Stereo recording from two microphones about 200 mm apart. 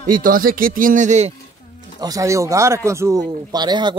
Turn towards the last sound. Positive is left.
turn(degrees=-20)  # may be behind; listen again after turning